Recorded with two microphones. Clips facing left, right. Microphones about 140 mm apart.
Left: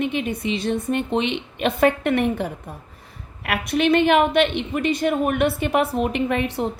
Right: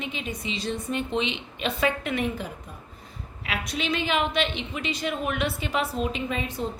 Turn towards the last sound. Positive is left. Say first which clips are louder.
# left 7 dB
turn(degrees=65)  # may be behind; listen again after turning